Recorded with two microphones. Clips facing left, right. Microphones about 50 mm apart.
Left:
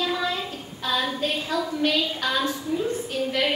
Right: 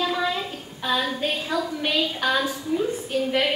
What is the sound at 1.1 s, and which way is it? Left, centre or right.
A woman's voice, centre.